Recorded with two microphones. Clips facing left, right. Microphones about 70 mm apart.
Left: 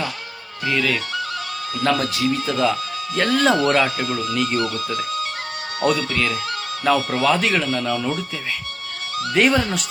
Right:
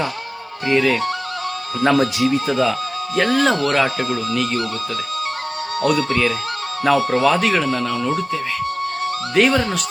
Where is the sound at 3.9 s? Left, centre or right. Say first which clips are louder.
Right 1 dB; right.